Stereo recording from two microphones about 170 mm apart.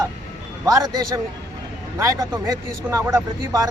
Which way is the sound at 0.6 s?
20° right (ahead or behind).